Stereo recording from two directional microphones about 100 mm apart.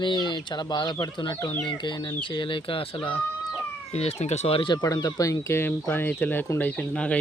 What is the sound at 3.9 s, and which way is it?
Speech, 90° left.